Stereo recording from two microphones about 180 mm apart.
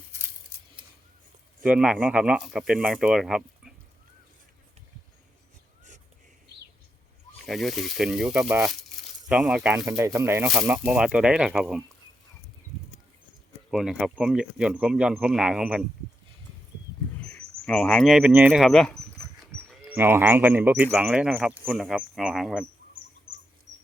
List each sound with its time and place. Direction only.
1.6 s speech: 5° right (ahead or behind)
7.4 s speech: centre (ahead or behind)
10.0 s speech: 15° right (ahead or behind)
12.7 s a sound: centre (ahead or behind)
13.7 s speech: 5° right (ahead or behind)
17.2 s cricket: 5° left (ahead or behind)
18.3 s speech: 10° right (ahead or behind)
19.8 s speech: 10° right (ahead or behind)